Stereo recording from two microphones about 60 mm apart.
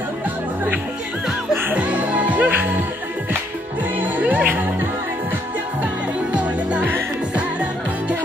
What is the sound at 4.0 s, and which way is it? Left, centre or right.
Music, right.